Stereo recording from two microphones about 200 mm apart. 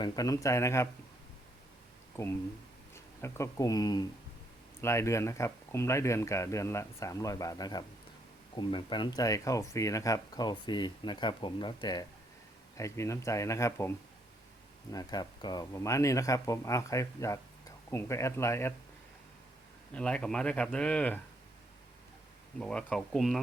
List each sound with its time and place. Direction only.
0.0 s speech: 20° left (ahead or behind)
2.9 s speech: 15° left (ahead or behind)
14.9 s speech: 20° left (ahead or behind)
19.9 s speech: 5° left (ahead or behind)
22.5 s speech: 5° left (ahead or behind)